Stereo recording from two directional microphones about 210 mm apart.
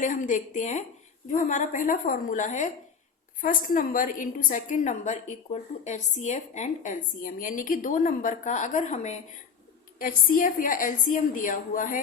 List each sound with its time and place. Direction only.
0.0 s a woman's voice: 35° left (ahead or behind)